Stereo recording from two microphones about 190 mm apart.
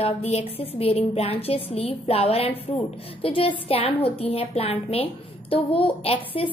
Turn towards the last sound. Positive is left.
turn(degrees=30)  # may be behind; listen again after turning